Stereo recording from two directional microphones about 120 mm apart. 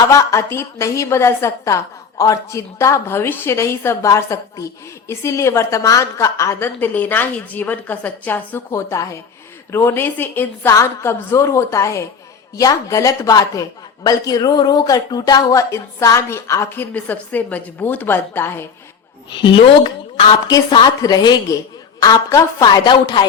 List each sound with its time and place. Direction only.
0.1 s a woman's voice: 25° left (ahead or behind)
19.3 s a woman's voice: 40° left (ahead or behind)